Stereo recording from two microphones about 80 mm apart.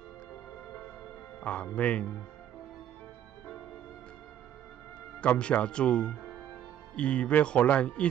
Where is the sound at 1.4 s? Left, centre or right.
Centre.